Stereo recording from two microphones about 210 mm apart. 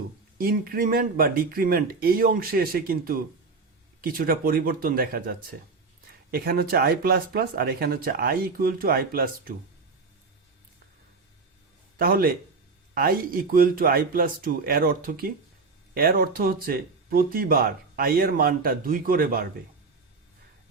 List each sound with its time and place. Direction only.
0.3 s speech: 45° right (ahead or behind)
11.9 s speech: 45° right (ahead or behind)